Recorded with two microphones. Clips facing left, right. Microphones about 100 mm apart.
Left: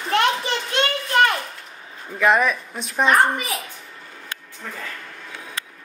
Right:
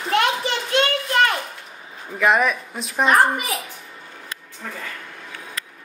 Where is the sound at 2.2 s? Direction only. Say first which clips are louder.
Even; centre (ahead or behind).